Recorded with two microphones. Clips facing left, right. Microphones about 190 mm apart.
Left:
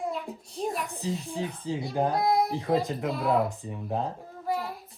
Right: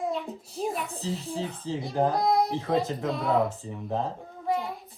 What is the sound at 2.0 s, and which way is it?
Speech, centre (ahead or behind).